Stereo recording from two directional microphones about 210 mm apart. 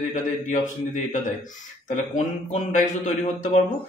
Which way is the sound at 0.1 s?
35° left (ahead or behind).